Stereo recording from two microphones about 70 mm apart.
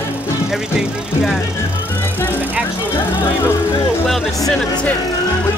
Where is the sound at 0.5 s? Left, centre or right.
Centre.